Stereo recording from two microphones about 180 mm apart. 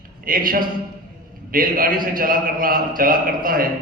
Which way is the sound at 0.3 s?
50° right (ahead or behind).